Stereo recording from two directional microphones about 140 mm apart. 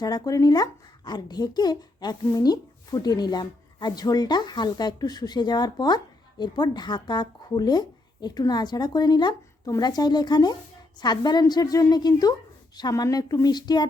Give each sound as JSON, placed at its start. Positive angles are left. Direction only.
{"t": 0.0, "sound": "speech", "side_deg": 25}